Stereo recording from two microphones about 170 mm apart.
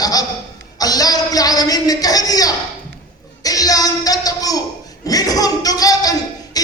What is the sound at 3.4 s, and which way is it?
Music, 20° left (ahead or behind).